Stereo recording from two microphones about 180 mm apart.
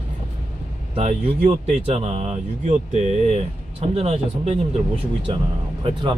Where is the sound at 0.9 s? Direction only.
35° right (ahead or behind).